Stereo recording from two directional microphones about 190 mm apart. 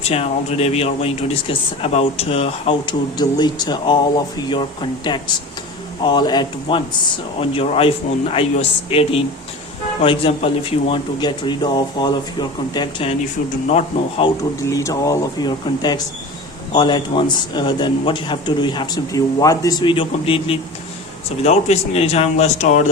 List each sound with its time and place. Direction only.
0.0 s speech: 35° left (ahead or behind)
14.7 s speech: 15° left (ahead or behind); by 22.9 s 40° left (ahead or behind)